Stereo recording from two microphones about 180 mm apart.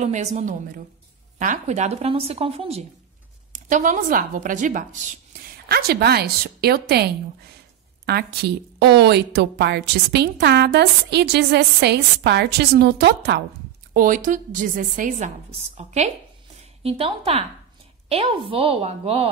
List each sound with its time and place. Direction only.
0.0 s speech: 40° right (ahead or behind)
3.5 s a woman's voice: 45° right (ahead or behind)
5.7 s a woman's voice: 60° right (ahead or behind)
13.9 s a woman's voice: 50° right (ahead or behind); by 19.3 s 35° right (ahead or behind)